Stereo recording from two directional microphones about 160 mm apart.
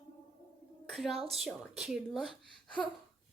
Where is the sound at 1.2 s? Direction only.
40° right (ahead or behind).